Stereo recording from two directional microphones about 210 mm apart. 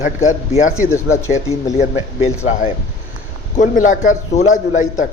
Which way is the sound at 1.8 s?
30° left (ahead or behind).